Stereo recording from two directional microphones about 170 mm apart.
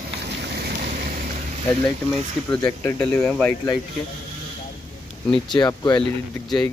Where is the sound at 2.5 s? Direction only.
25° left (ahead or behind).